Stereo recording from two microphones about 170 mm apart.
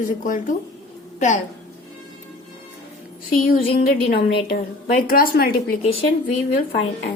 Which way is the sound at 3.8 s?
60° left (ahead or behind).